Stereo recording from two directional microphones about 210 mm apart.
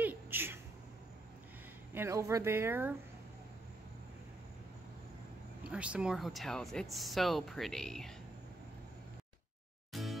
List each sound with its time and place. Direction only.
0.0 s a sound: 10° right (ahead or behind)
2.0 s speech: 15° right (ahead or behind)
5.6 s speech: 5° right (ahead or behind)
9.9 s music: centre (ahead or behind)